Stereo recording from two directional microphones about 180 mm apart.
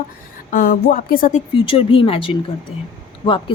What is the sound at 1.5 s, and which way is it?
Speech, 30° left (ahead or behind).